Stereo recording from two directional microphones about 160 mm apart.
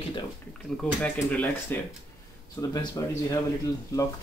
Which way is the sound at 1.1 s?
10° left (ahead or behind).